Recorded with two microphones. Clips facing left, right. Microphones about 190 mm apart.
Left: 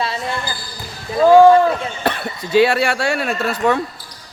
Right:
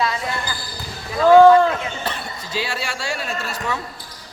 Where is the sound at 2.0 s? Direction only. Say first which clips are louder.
Left 7 dB; 60° left (ahead or behind).